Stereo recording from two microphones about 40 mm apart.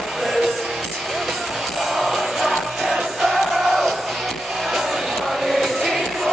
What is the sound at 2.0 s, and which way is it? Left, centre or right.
Music, centre.